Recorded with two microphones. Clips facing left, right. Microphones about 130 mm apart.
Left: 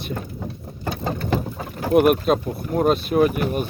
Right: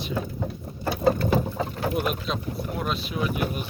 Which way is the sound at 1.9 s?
60° left (ahead or behind).